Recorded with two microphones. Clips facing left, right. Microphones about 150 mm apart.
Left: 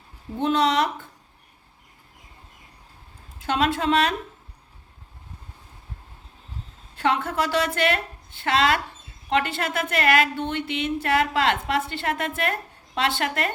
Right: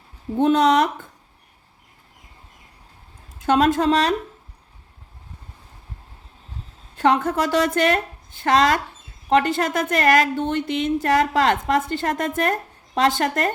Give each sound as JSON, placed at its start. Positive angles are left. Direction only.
{"t": 0.3, "sound": "a woman's voice", "side_deg": -45}
{"t": 3.4, "sound": "speech", "side_deg": -45}
{"t": 6.9, "sound": "a woman's voice", "side_deg": -45}